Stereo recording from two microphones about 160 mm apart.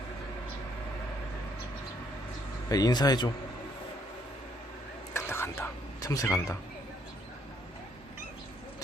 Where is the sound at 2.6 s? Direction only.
25° left (ahead or behind).